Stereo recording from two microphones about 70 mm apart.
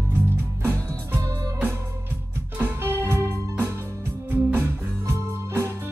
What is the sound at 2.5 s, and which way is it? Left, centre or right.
Music, right.